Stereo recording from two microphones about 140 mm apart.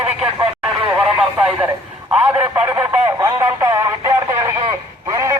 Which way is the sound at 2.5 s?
15° right (ahead or behind).